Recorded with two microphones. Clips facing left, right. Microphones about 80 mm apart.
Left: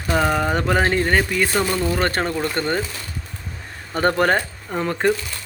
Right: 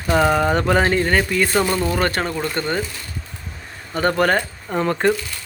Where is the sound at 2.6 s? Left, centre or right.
Left.